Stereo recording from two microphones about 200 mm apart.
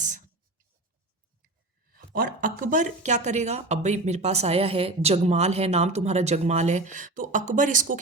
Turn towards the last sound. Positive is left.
turn(degrees=-40)  # may be behind; listen again after turning